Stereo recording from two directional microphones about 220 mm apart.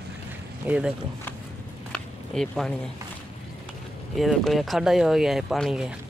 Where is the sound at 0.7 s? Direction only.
5° right (ahead or behind).